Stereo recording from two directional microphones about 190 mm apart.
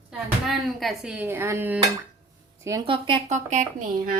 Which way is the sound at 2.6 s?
15° right (ahead or behind).